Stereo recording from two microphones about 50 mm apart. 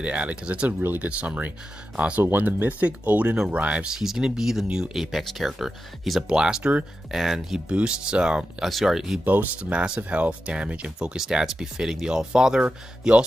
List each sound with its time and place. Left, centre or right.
0.0 s speech: right
3.9 s speech: centre
4.9 s speech: centre
6.2 s speech: centre
7.1 s speech: centre
8.6 s speech: centre
9.2 s speech: right
11.1 s speech: centre